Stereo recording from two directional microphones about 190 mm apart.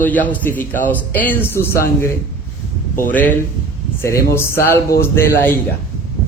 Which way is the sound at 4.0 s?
15° left (ahead or behind).